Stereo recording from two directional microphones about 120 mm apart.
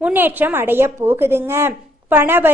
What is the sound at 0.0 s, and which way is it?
A woman's voice, 15° right (ahead or behind).